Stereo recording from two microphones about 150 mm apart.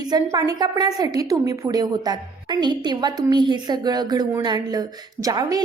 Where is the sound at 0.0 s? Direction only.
25° right (ahead or behind).